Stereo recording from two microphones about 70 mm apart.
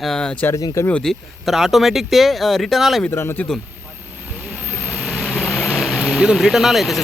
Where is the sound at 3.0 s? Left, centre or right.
Left.